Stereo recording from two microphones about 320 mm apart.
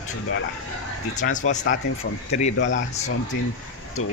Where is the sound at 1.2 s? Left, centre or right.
Left.